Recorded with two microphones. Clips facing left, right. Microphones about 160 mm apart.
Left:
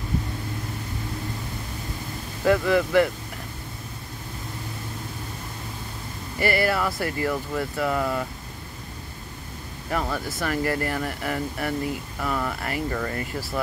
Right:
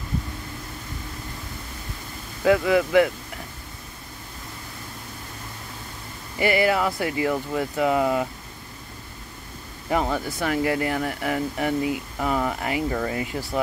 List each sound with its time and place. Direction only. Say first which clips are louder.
2.4 s speech: right 1 dB; 5° right (ahead or behind)
6.4 s speech: right 2 dB; 15° right (ahead or behind)
9.8 s speech: right 4 dB; 15° right (ahead or behind)